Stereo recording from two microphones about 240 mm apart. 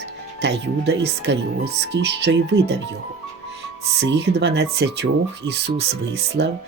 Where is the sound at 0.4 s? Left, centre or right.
Right.